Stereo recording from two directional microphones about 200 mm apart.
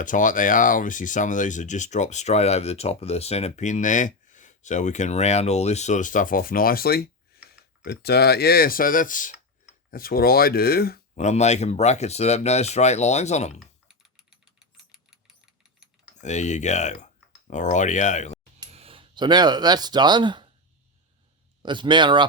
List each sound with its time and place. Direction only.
0.0 s speech: 40° left (ahead or behind)
7.3 s a sound: 50° left (ahead or behind)
7.9 s speech: 55° left (ahead or behind)
11.1 s speech: 35° left (ahead or behind)
13.6 s computer keyboard: centre (ahead or behind)
16.2 s speech: 35° left (ahead or behind)
18.7 s speech: 30° right (ahead or behind)
21.6 s a man's voice: 25° right (ahead or behind)